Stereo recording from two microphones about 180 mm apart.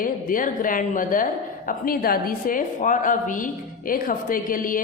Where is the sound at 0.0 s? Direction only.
50° left (ahead or behind).